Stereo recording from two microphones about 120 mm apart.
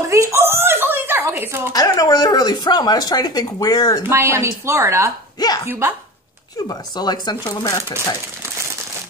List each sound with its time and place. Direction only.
0.1 s a sound: 25° right (ahead or behind)
1.7 s speech: 30° left (ahead or behind)
4.1 s speech: 20° right (ahead or behind)
6.7 s speech: 35° left (ahead or behind)